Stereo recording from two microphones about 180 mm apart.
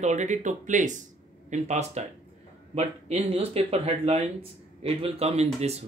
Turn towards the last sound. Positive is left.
turn(degrees=-35)  # may be behind; listen again after turning